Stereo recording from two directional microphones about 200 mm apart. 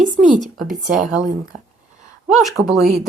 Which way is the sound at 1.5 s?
35° right (ahead or behind).